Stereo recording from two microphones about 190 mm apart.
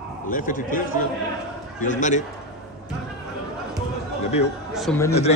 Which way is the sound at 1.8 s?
40° left (ahead or behind).